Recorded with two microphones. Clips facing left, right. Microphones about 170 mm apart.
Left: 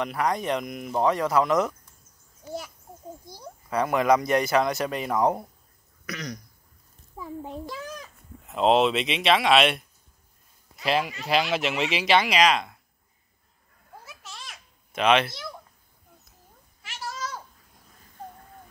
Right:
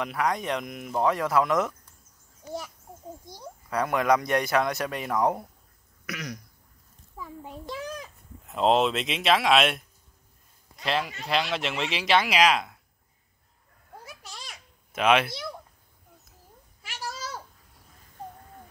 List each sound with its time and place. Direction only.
0.0 s speech: centre (ahead or behind)
3.7 s speech: centre (ahead or behind)
7.2 s a sound: 30° left (ahead or behind)
7.7 s a sound: 15° right (ahead or behind)
8.5 s speech: centre (ahead or behind)
14.9 s speech: 5° right (ahead or behind)